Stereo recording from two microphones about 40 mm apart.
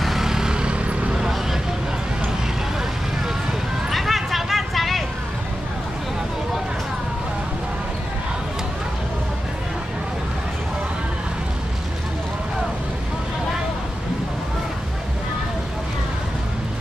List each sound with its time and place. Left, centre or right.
0.0 s vehicle: centre; by 0.9 s right
1.1 s vehicle: centre
3.9 s a sound: centre